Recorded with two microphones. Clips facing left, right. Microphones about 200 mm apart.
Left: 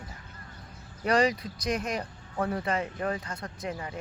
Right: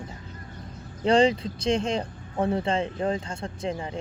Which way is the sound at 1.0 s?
25° right (ahead or behind).